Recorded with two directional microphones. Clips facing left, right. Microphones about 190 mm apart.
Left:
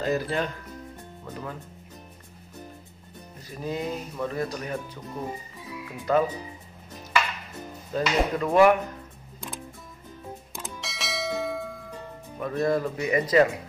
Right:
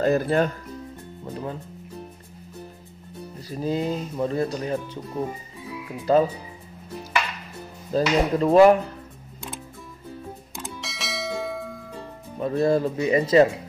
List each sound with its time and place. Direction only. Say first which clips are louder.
0.0 s speech: right 6 dB; 50° right (ahead or behind)
1.2 s speech: right 5 dB; 30° right (ahead or behind)
3.3 s speech: right 5 dB; 30° right (ahead or behind)
6.1 s speech: right 4 dB; 30° right (ahead or behind)
7.9 s speech: right 4 dB; 25° right (ahead or behind)
10.8 s bell: even; centre (ahead or behind)
12.4 s speech: right 4 dB; 30° right (ahead or behind)